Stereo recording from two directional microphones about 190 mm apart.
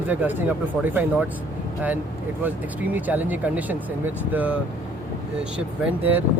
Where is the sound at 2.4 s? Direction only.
10° right (ahead or behind).